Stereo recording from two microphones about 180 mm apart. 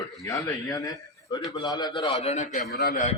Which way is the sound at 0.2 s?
20° left (ahead or behind).